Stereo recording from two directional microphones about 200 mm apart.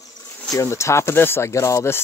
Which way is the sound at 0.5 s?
15° left (ahead or behind).